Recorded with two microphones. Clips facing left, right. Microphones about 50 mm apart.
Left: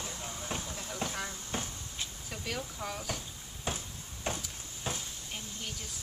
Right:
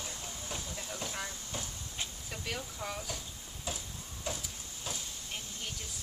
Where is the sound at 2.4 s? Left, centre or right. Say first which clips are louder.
Left 2 dB; centre.